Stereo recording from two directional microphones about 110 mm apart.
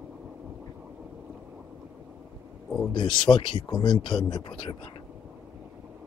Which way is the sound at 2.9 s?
50° left (ahead or behind).